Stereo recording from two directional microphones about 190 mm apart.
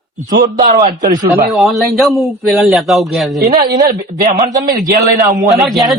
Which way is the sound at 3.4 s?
55° right (ahead or behind).